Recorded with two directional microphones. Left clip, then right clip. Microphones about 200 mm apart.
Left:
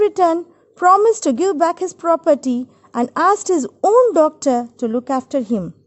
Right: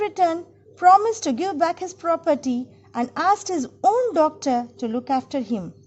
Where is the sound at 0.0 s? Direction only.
45° left (ahead or behind).